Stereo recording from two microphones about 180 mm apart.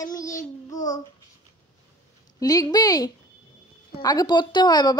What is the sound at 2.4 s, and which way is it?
Speech, 20° left (ahead or behind).